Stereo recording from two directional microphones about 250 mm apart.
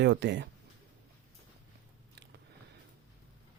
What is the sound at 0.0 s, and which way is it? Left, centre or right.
Speech, right.